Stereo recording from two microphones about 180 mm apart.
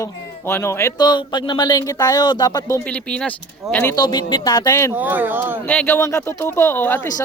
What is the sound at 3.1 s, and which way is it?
Speech, 5° left (ahead or behind).